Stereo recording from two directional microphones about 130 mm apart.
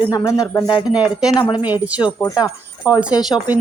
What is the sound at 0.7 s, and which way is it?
Speech, 35° left (ahead or behind).